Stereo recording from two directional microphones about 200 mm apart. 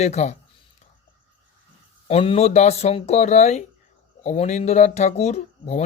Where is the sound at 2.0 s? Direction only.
30° left (ahead or behind).